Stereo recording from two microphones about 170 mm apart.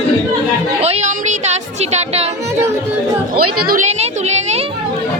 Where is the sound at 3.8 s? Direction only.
40° right (ahead or behind).